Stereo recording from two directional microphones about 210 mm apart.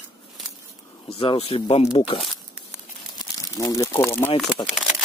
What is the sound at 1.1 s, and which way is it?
Speech, 30° left (ahead or behind).